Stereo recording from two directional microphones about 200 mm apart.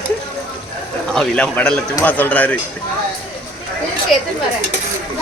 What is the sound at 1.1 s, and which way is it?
Speech, 5° left (ahead or behind).